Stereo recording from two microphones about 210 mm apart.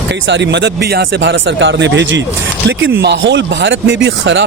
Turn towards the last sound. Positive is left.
turn(degrees=-60)  # may be behind; listen again after turning